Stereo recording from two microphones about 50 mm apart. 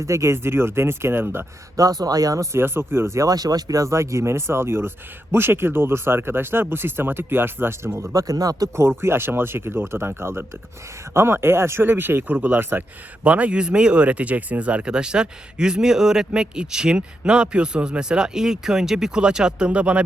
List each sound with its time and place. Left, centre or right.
0.0 s speech: right
2.3 s speech: right
2.6 s speech: right
3.8 s speech: right
8.1 s speech: right
9.0 s speech: right
13.2 s speech: right